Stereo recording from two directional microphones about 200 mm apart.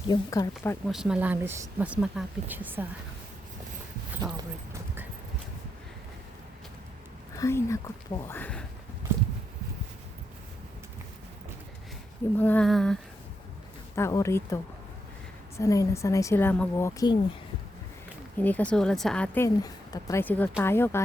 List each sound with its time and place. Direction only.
0.1 s a woman's voice: 15° left (ahead or behind)
0.9 s a woman's voice: centre (ahead or behind)
4.1 s a sound: 15° right (ahead or behind)
7.3 s a woman's voice: 15° left (ahead or behind)
12.4 s a sound: 5° left (ahead or behind)
13.9 s a woman's voice: 15° left (ahead or behind)
18.3 s a woman's voice: 10° left (ahead or behind)